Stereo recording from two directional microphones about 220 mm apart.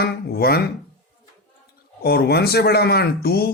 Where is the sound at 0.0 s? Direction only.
45° left (ahead or behind).